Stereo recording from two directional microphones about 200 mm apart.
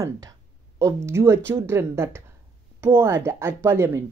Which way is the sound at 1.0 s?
15° right (ahead or behind).